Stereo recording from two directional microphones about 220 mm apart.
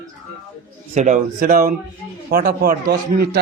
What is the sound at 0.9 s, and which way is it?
A man's voice, 35° right (ahead or behind).